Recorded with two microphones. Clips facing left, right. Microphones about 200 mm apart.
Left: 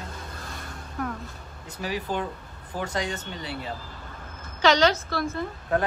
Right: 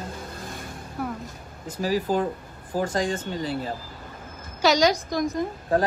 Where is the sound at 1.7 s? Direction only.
40° right (ahead or behind).